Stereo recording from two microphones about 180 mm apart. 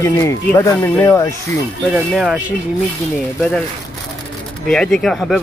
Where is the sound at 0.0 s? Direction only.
15° left (ahead or behind).